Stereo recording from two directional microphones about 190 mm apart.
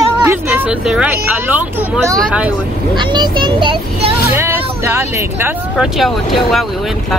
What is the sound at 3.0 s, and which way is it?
Speech, 25° right (ahead or behind).